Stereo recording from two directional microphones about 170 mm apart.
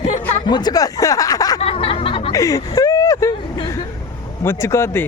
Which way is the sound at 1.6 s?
35° left (ahead or behind).